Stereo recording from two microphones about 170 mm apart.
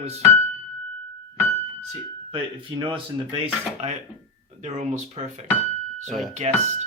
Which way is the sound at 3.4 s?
40° right (ahead or behind).